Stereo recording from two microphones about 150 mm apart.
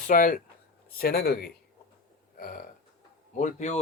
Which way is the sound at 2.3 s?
70° left (ahead or behind).